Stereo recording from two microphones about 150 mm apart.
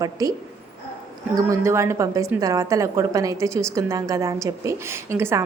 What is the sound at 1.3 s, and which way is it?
A woman's voice, 20° right (ahead or behind).